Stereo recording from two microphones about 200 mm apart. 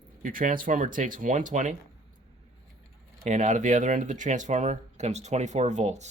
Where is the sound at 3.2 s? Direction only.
35° right (ahead or behind).